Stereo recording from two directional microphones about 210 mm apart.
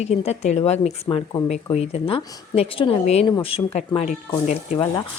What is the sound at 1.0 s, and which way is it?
Speech, 20° left (ahead or behind).